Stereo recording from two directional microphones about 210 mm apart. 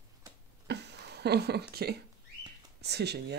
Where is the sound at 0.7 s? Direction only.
55° right (ahead or behind).